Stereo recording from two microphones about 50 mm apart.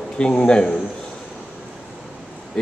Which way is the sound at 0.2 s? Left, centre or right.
Centre.